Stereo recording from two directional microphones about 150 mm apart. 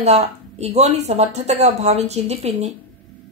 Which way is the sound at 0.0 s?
45° right (ahead or behind).